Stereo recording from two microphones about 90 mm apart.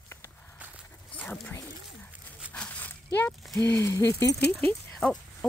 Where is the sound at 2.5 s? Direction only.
15° left (ahead or behind).